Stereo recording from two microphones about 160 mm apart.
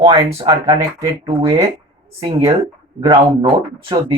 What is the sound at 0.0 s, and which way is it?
Speech, 35° right (ahead or behind).